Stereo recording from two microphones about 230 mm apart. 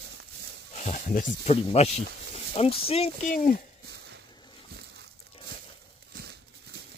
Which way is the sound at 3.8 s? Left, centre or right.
Right.